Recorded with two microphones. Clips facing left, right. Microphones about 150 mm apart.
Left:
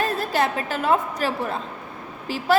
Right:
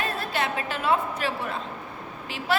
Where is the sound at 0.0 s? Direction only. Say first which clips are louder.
Left 6 dB; 40° left (ahead or behind).